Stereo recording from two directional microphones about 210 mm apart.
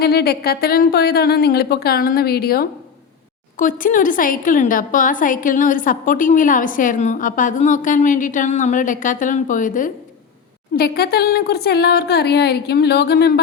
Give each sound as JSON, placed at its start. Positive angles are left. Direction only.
{"t": 0.0, "sound": "a woman's voice", "side_deg": 50}